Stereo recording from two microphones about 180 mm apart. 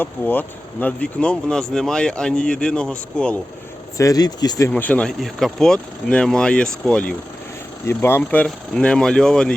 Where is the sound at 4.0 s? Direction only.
20° left (ahead or behind).